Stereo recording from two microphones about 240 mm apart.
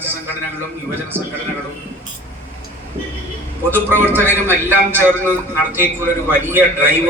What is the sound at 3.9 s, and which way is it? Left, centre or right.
A man's voice, centre.